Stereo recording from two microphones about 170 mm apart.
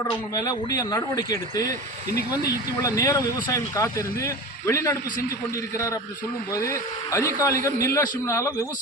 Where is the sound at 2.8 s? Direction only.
20° left (ahead or behind).